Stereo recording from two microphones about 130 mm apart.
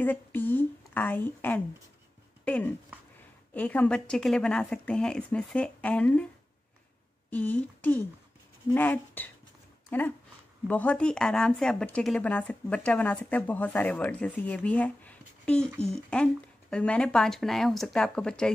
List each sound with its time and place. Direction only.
0.0 s a woman's voice: 15° left (ahead or behind)
7.2 s speech: 10° left (ahead or behind)